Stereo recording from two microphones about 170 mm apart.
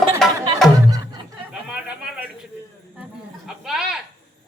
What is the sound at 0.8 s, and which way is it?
Music, 25° right (ahead or behind).